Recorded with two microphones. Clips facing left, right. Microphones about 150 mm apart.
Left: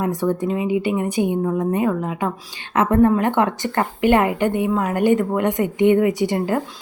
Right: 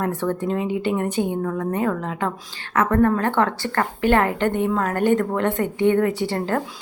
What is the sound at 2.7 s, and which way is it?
A woman's voice, 20° left (ahead or behind).